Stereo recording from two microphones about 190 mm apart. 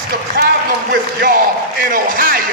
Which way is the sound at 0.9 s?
50° right (ahead or behind).